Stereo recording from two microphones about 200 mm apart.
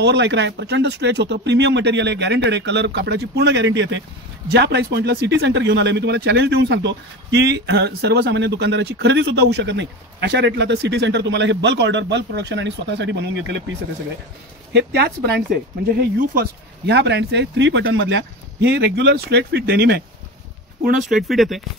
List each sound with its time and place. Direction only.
0.0 s speech: 60° right (ahead or behind)
14.7 s speech: 55° right (ahead or behind)
21.1 s speech: centre (ahead or behind)